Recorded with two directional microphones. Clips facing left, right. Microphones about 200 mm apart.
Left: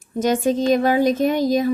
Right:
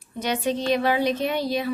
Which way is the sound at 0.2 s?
45° left (ahead or behind).